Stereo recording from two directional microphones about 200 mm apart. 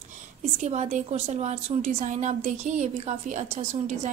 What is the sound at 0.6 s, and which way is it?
A woman's voice, 35° right (ahead or behind).